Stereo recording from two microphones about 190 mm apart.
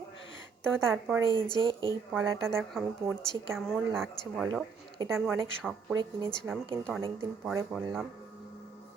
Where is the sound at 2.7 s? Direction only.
Centre (ahead or behind).